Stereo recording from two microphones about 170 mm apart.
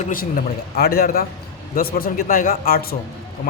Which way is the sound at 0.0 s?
55° left (ahead or behind).